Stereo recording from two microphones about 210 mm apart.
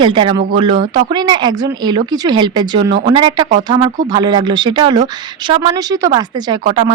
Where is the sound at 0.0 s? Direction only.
25° right (ahead or behind).